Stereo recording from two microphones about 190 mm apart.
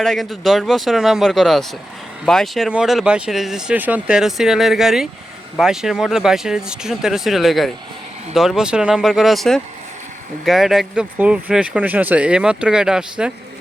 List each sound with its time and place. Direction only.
0.0 s speech: centre (ahead or behind)